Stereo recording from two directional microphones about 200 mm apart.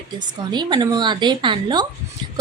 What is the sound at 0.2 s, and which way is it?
A woman's voice, 20° right (ahead or behind).